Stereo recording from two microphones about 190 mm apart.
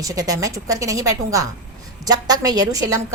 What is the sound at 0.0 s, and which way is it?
A woman's voice, 20° right (ahead or behind).